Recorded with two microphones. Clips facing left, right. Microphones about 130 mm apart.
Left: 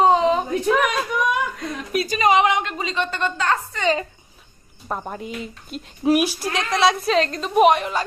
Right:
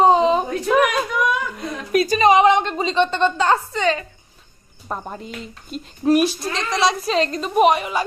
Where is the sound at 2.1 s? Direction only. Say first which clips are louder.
Right 3 dB; 25° right (ahead or behind).